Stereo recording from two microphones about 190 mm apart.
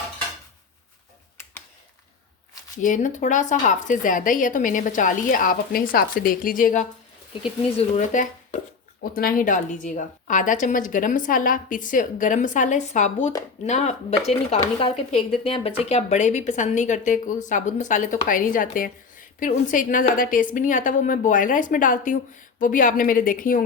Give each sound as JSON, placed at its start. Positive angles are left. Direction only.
{"t": 2.8, "sound": "a woman's voice", "side_deg": 40}
{"t": 7.4, "sound": "a woman's voice", "side_deg": 35}